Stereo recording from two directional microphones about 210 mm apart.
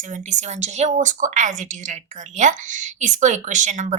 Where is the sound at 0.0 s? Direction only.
35° right (ahead or behind).